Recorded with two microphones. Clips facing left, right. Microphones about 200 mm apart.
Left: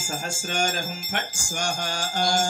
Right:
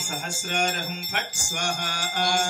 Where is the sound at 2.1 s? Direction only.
35° left (ahead or behind).